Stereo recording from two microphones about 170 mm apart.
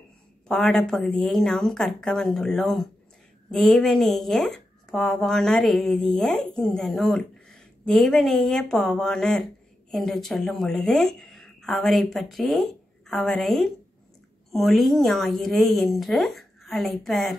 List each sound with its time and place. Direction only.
0.5 s a woman's voice: 5° left (ahead or behind)